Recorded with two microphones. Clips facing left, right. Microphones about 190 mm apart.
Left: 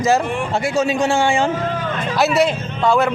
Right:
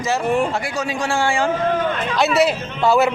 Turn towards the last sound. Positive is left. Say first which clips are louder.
# even
turn(degrees=-5)  # may be behind; listen again after turning